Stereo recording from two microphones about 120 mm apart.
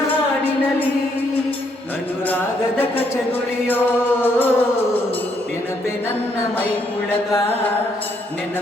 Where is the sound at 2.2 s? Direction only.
15° left (ahead or behind).